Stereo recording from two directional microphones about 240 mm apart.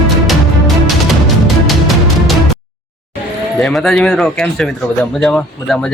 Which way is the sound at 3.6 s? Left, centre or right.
Centre.